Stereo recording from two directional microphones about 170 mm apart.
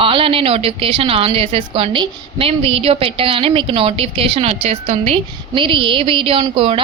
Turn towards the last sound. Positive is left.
turn(degrees=-30)  # may be behind; listen again after turning